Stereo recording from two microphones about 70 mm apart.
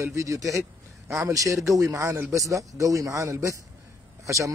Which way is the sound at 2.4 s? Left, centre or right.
Right.